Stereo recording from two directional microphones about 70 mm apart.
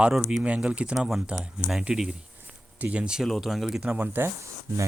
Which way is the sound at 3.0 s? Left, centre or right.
Centre.